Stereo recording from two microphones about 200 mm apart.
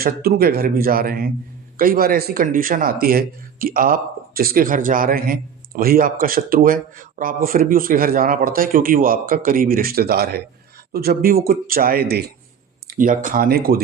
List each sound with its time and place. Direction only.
0.0 s speech: 50° right (ahead or behind)